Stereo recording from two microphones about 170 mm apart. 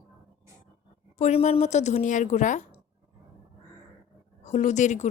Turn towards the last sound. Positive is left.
turn(degrees=45)  # may be behind; listen again after turning